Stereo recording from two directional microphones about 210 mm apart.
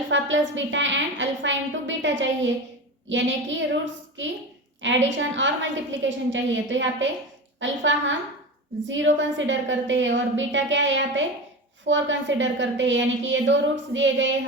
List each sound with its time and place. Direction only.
0.1 s a woman's voice: 65° right (ahead or behind)
5.0 s a woman's voice: 60° right (ahead or behind)